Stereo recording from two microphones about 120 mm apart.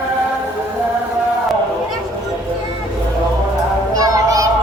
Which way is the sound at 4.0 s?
30° right (ahead or behind).